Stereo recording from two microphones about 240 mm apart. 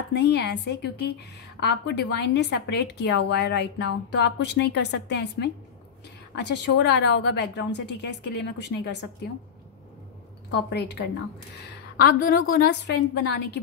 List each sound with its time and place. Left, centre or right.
0.1 s a woman's voice: left
10.5 s a woman's voice: left
12.2 s a woman's voice: left